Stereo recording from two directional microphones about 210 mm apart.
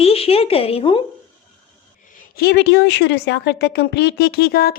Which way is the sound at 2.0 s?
40° left (ahead or behind).